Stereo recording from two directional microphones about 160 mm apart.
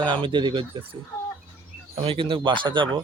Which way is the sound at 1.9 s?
35° right (ahead or behind).